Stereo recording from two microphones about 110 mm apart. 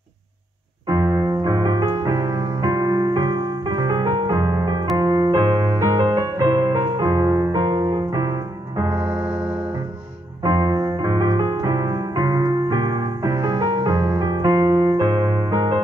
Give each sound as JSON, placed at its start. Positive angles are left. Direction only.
{"t": 0.8, "sound": "music", "side_deg": -35}
{"t": 8.9, "sound": "music", "side_deg": -15}
{"t": 10.4, "sound": "music", "side_deg": -40}